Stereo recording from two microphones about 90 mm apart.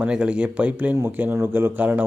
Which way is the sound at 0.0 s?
10° right (ahead or behind).